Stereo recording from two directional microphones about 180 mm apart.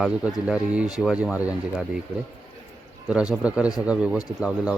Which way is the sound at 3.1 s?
5° right (ahead or behind).